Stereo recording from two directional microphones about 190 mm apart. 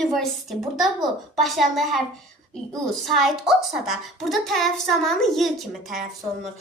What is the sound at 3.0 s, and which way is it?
A woman's voice, centre (ahead or behind).